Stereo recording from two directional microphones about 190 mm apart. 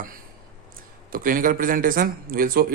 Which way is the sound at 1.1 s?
45° right (ahead or behind).